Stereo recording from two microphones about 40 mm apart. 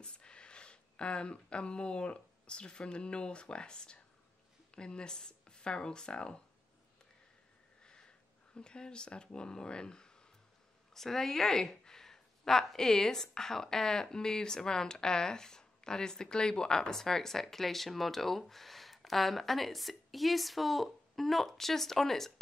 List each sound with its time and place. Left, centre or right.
0.0 s speech: left
7.8 s sniff: left
8.5 s speech: left